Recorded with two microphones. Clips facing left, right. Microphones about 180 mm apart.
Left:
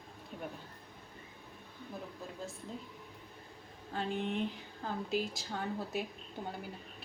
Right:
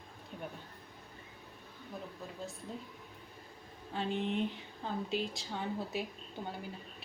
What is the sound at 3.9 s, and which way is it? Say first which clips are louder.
A woman's voice: right 1 dB; centre (ahead or behind).